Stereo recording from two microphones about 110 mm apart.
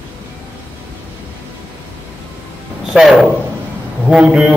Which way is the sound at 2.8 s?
5° right (ahead or behind).